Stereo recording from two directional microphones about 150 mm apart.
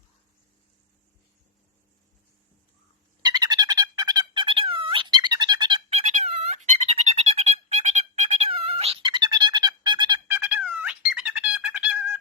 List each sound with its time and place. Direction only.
3.2 s music: 25° right (ahead or behind)
6.2 s music: 45° right (ahead or behind); by 10.2 s 30° right (ahead or behind)
10.2 s a sound: 15° right (ahead or behind)